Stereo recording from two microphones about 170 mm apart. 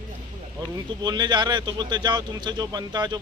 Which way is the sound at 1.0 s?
25° right (ahead or behind).